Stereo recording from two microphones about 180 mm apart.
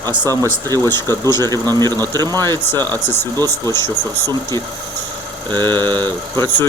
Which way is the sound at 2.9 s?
10° left (ahead or behind).